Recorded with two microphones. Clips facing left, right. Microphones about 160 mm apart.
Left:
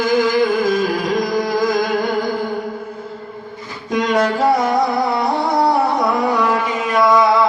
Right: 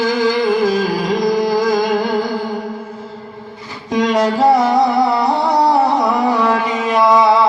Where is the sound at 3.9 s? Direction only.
30° right (ahead or behind).